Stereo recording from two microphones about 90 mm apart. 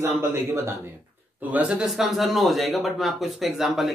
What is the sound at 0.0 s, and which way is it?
Speech, 25° right (ahead or behind).